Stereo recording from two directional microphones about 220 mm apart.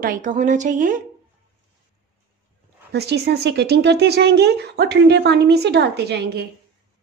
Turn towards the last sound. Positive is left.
turn(degrees=-50)  # may be behind; listen again after turning